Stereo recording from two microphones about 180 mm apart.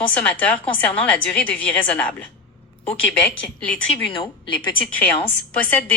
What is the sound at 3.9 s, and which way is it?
Speech, 30° left (ahead or behind).